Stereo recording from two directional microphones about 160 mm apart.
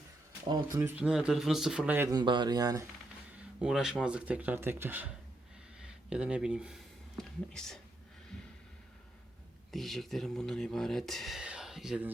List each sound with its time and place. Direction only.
0.4 s speech: 25° right (ahead or behind)
0.8 s speech: 10° right (ahead or behind)
2.0 s speech: 25° right (ahead or behind)
3.6 s speech: 5° right (ahead or behind)
9.7 s speech: centre (ahead or behind)